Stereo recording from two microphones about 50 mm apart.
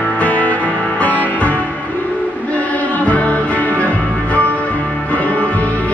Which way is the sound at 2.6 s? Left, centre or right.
Left.